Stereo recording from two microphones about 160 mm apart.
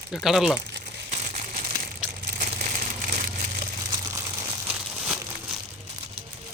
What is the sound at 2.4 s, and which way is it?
Crumpling, 60° right (ahead or behind).